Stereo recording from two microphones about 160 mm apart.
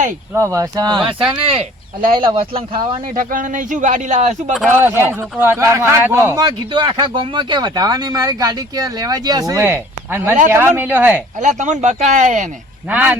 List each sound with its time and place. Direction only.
0.3 s speech: 20° right (ahead or behind)
1.2 s speech: 35° right (ahead or behind)
3.2 s speech: 60° right (ahead or behind)
4.8 s speech: 15° right (ahead or behind)
6.4 s speech: 30° right (ahead or behind); by 11.2 s 10° right (ahead or behind)
11.3 s speech: 50° right (ahead or behind)
12.9 s speech: 10° right (ahead or behind)